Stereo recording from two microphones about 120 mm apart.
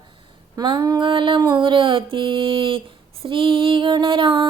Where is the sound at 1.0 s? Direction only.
45° right (ahead or behind).